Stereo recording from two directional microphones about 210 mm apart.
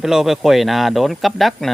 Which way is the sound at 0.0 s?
Centre (ahead or behind).